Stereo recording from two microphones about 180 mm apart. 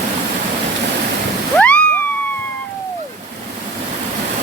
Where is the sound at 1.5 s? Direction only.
5° left (ahead or behind).